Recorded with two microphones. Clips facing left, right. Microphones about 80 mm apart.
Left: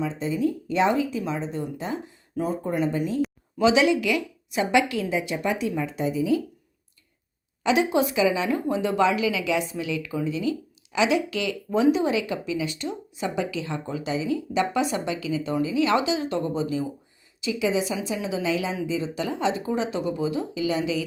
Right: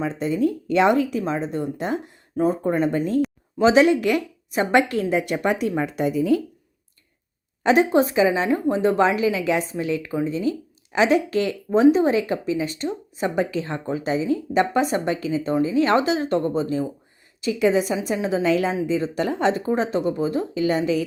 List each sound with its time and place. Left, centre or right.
0.0 s speech: right
1.2 s a woman's voice: right
2.3 s speech: right
2.6 s a woman's voice: right
3.6 s a woman's voice: right
7.6 s a woman's voice: right